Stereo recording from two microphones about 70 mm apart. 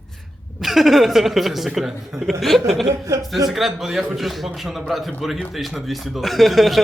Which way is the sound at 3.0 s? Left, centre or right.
Right.